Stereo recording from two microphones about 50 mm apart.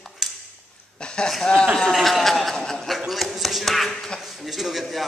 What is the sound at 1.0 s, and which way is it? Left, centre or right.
Speech, centre.